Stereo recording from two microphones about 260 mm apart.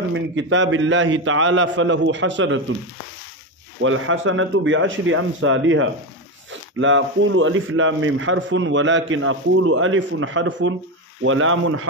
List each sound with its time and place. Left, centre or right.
0.1 s a man's voice: right
3.8 s a man's voice: right